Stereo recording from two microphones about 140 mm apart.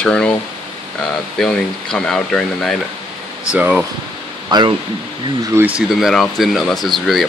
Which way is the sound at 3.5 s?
10° right (ahead or behind).